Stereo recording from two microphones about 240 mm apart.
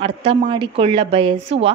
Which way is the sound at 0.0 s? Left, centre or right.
Right.